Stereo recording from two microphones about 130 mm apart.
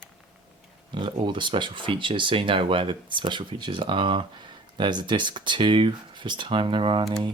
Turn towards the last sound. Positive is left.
turn(degrees=-40)  # may be behind; listen again after turning